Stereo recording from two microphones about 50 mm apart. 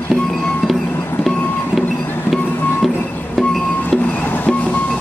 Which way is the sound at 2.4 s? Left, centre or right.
Left.